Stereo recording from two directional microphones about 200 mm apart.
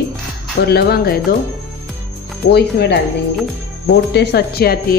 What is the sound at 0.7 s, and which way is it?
Speech, 50° left (ahead or behind).